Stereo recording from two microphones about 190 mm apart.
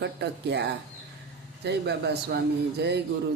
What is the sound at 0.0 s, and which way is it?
Speech, 60° right (ahead or behind).